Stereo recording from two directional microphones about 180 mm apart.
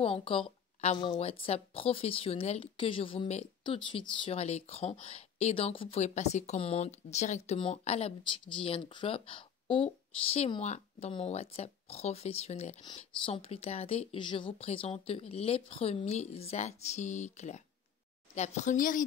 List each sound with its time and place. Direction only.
0.0 s speech: 30° left (ahead or behind)
12.8 s speech: 25° left (ahead or behind); by 19.0 s 50° left (ahead or behind)